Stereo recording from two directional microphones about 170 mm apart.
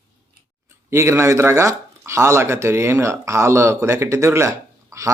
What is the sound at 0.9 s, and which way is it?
Speech, 15° right (ahead or behind).